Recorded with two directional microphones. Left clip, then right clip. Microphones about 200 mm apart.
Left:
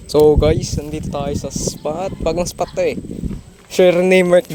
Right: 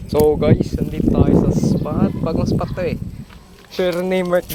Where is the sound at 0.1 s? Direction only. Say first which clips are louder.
Left 3 dB; 45° left (ahead or behind).